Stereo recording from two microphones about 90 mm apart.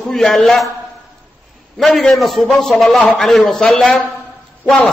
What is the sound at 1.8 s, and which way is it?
A man's voice, centre (ahead or behind).